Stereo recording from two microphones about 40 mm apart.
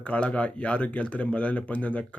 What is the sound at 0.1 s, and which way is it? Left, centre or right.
Speech, left.